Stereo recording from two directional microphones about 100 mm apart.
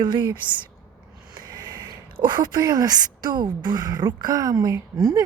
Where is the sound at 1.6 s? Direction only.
45° right (ahead or behind).